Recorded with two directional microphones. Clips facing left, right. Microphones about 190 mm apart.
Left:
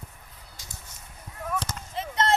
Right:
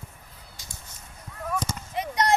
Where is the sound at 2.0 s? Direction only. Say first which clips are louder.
Right 1 dB; 15° right (ahead or behind).